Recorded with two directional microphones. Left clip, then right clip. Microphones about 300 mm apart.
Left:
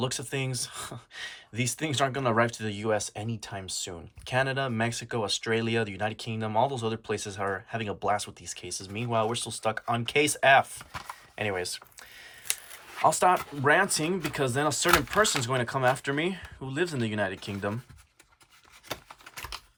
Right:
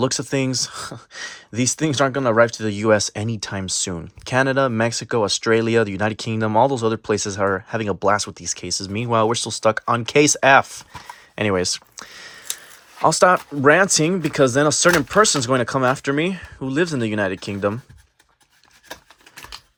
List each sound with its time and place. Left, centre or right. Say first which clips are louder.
0.0 s speech: right 11 dB; centre
8.9 s speech: right 7 dB; right
9.3 s speech: right 11 dB; right
11.6 s a sound: right 11 dB; right
13.0 s speech: right 8 dB; centre